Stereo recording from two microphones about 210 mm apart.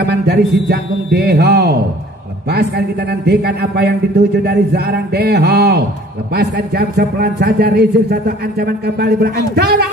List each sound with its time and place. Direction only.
0.0 s a man's voice: 50° right (ahead or behind)
3.1 s a man's voice: 50° right (ahead or behind)